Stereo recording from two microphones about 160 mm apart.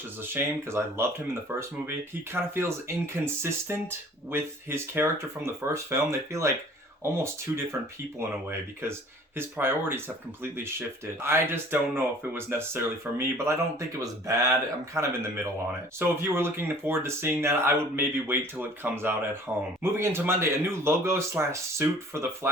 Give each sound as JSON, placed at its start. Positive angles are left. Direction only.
{"t": 0.2, "sound": "speech", "side_deg": -15}